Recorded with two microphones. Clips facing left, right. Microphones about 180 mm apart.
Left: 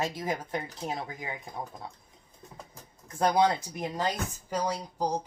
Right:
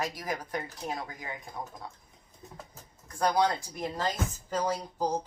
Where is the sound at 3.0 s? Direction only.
20° left (ahead or behind).